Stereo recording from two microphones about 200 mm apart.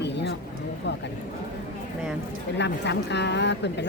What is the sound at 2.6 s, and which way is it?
Speech, 60° left (ahead or behind).